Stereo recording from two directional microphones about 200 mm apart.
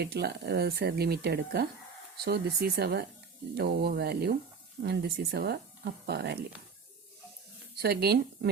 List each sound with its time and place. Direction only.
0.0 s speech: 55° right (ahead or behind)
7.8 s speech: 50° right (ahead or behind)